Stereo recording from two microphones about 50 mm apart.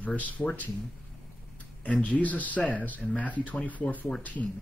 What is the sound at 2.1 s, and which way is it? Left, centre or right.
Speech, left.